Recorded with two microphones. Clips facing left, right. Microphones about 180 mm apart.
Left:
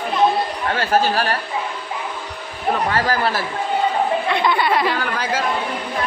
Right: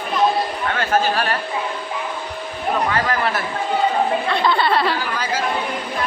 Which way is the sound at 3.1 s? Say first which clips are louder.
Left 1 dB; 35° left (ahead or behind).